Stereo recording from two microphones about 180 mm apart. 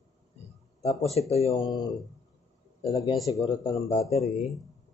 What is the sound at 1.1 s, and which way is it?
Speech, 35° left (ahead or behind).